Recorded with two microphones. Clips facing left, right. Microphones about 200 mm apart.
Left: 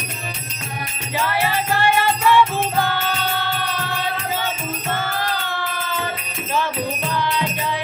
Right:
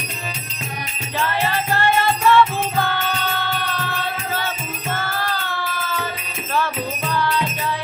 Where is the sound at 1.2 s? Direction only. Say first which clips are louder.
Left 1 dB; 10° left (ahead or behind).